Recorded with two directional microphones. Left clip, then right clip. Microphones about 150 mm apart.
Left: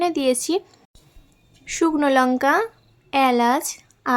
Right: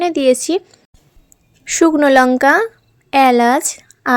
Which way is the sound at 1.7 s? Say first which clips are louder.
Right 8 dB; 40° right (ahead or behind).